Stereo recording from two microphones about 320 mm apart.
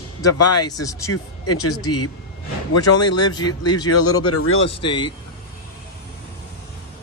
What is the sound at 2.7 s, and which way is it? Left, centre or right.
Speech, left.